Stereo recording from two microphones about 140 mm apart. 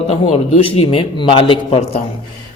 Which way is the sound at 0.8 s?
40° left (ahead or behind).